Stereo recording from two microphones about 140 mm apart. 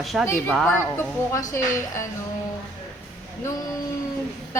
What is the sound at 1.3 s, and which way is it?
Speech, 20° left (ahead or behind).